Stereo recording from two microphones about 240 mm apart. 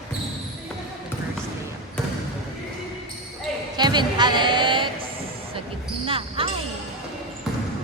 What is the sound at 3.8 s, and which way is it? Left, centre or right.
Speech, centre.